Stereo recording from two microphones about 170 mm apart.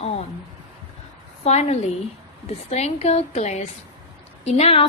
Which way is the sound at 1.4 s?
40° left (ahead or behind).